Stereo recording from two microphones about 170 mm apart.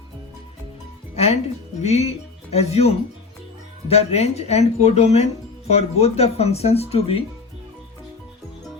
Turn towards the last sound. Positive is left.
turn(degrees=35)  # may be behind; listen again after turning